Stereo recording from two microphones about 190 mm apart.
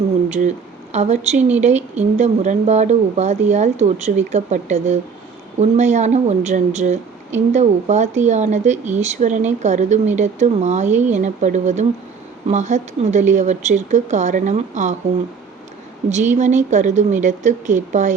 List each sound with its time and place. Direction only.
0.9 s a woman's voice: 35° right (ahead or behind)
16.0 s a woman's voice: 40° right (ahead or behind)